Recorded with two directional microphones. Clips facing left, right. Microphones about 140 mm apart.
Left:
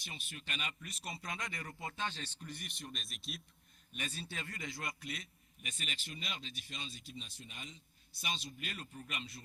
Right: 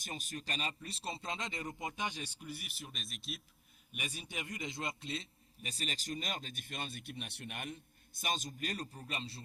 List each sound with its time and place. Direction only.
0.0 s speech: 40° right (ahead or behind); by 3.4 s centre (ahead or behind)
3.9 s a man's voice: 10° right (ahead or behind); by 9.4 s 30° right (ahead or behind)